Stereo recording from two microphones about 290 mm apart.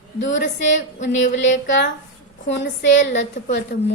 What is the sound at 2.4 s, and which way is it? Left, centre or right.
A woman's voice, left.